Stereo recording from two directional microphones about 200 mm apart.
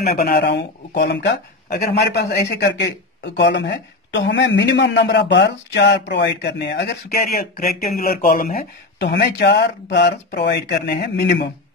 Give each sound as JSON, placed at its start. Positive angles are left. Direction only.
{"t": 0.0, "sound": "speech", "side_deg": 55}